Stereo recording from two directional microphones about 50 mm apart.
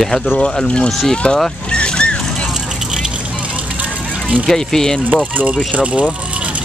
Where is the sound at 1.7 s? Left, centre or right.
Centre.